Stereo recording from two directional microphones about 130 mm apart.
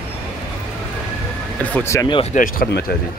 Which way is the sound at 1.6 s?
10° left (ahead or behind).